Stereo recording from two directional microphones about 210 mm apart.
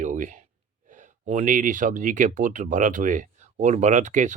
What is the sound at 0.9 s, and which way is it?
Speech, 35° right (ahead or behind).